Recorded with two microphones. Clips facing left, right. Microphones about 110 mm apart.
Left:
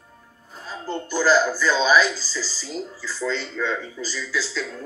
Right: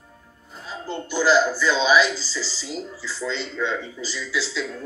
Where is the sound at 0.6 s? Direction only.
45° left (ahead or behind).